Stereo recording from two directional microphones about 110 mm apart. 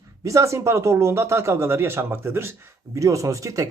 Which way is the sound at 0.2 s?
30° right (ahead or behind).